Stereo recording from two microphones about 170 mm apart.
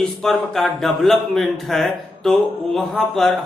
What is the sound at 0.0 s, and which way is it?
A man's voice, centre (ahead or behind).